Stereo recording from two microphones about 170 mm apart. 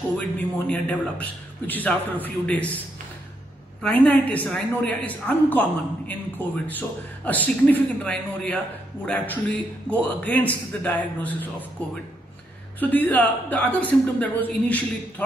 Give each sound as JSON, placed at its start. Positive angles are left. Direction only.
{"t": 0.4, "sound": "a woman's voice", "side_deg": 10}
{"t": 3.8, "sound": "a woman's voice", "side_deg": 10}
{"t": 12.7, "sound": "a woman's voice", "side_deg": 10}